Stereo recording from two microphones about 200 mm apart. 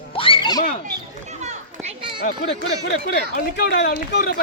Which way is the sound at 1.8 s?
25° right (ahead or behind).